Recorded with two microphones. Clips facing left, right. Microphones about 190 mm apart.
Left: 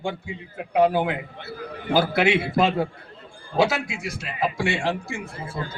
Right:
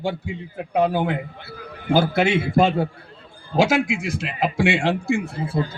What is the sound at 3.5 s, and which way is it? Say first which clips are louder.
Speech: right 3 dB; 90° right.